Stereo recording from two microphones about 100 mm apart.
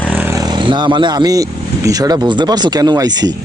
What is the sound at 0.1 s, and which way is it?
Vehicle, 15° right (ahead or behind).